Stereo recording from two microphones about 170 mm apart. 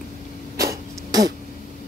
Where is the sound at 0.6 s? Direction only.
20° right (ahead or behind).